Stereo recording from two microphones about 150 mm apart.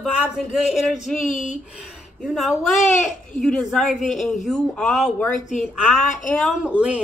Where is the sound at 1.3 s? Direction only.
55° left (ahead or behind).